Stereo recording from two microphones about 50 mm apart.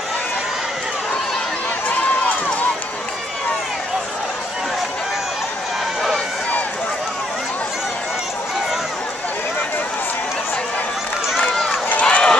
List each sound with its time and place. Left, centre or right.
1.9 s run: left
11.5 s run: centre
11.9 s run: left